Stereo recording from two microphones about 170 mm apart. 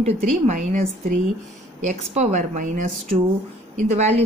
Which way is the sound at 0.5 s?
45° right (ahead or behind).